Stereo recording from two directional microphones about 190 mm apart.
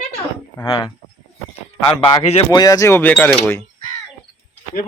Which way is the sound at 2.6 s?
15° left (ahead or behind).